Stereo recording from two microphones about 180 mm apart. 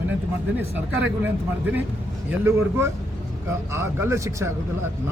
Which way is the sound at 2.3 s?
10° right (ahead or behind).